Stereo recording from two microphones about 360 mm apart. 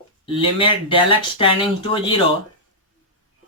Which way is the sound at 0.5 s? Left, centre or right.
Centre.